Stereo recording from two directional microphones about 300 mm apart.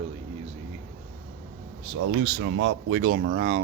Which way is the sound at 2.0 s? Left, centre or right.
Right.